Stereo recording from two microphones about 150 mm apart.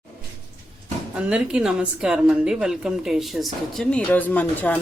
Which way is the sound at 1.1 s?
5° right (ahead or behind).